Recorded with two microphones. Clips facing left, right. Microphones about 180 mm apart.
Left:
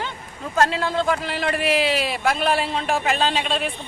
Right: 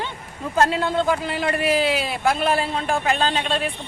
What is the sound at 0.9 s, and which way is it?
A man's voice, 5° right (ahead or behind).